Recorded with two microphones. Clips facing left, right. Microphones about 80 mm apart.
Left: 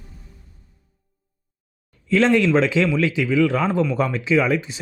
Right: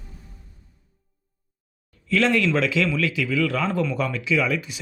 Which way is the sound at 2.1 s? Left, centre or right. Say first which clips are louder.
Left 4 dB; left.